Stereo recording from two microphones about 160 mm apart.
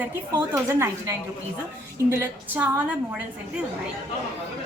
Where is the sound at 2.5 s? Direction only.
10° right (ahead or behind).